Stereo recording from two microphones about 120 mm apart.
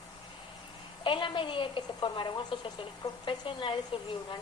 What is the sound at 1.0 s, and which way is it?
A woman's voice, 45° left (ahead or behind).